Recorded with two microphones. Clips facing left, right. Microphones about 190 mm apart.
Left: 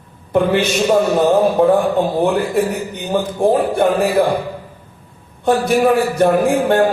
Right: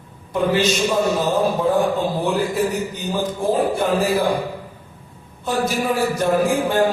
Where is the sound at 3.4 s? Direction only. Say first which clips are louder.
Left 6 dB; 60° left (ahead or behind).